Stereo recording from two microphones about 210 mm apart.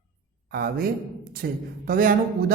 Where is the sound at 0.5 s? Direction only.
45° right (ahead or behind).